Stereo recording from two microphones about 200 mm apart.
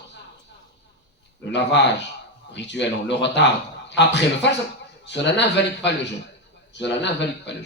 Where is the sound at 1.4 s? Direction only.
60° left (ahead or behind).